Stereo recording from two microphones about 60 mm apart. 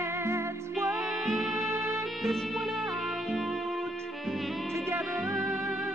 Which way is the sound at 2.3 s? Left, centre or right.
Centre.